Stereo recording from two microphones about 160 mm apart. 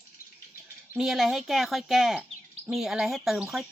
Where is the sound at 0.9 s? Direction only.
Centre (ahead or behind).